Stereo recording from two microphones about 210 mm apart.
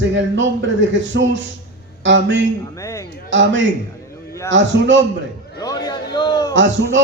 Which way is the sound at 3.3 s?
60° right (ahead or behind).